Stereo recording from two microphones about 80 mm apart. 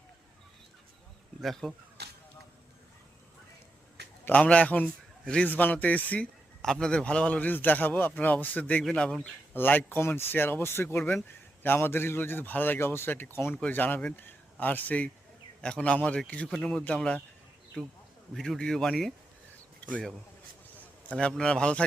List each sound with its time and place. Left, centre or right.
1.4 s speech: centre
4.3 s a man's voice: centre
5.5 s a man's voice: left
6.6 s a man's voice: centre
9.5 s a man's voice: left
17.8 s speech: centre
20.7 s a man's voice: centre